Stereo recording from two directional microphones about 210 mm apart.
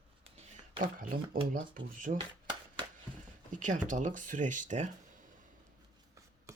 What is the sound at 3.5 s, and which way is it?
Speech, 35° right (ahead or behind).